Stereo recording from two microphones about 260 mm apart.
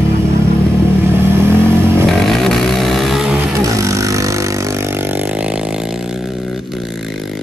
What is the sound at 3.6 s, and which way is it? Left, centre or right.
Vehicle, centre.